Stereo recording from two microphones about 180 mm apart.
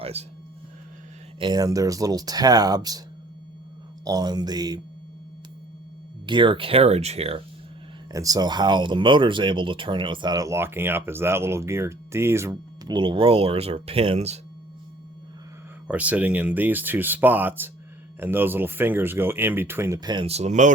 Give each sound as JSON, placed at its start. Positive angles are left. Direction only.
{"t": 0.0, "sound": "music", "side_deg": -35}
{"t": 1.4, "sound": "speech", "side_deg": -25}
{"t": 4.0, "sound": "speech", "side_deg": -20}
{"t": 6.2, "sound": "speech", "side_deg": -25}
{"t": 8.1, "sound": "speech", "side_deg": -20}
{"t": 15.9, "sound": "speech", "side_deg": -10}